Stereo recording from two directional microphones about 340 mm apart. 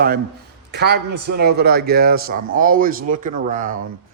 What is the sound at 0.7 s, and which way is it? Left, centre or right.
A man's voice, right.